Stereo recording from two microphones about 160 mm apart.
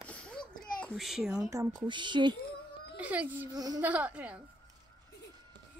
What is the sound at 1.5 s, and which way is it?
Speech, 20° right (ahead or behind).